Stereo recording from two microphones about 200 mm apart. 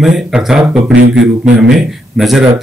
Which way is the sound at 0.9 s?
65° right (ahead or behind).